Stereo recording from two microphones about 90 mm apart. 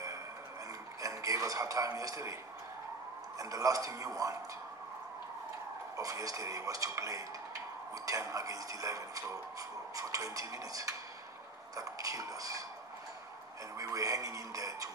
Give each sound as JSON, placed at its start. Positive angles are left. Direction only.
{"t": 1.0, "sound": "a man's voice", "side_deg": -40}
{"t": 3.3, "sound": "speech", "side_deg": -40}
{"t": 5.9, "sound": "speech", "side_deg": -40}
{"t": 13.7, "sound": "speech", "side_deg": -40}